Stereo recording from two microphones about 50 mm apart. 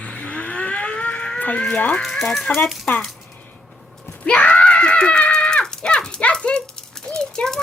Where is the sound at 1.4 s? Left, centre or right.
Left.